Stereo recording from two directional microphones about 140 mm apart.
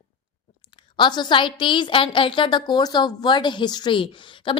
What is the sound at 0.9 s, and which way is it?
A woman's voice, 35° left (ahead or behind).